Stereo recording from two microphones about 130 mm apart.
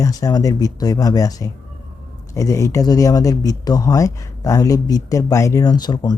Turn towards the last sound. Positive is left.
turn(degrees=30)  # may be behind; listen again after turning